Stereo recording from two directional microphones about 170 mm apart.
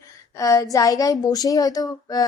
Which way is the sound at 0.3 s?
20° left (ahead or behind).